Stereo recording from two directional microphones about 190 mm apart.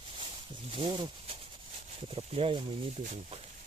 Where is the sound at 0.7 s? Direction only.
30° right (ahead or behind).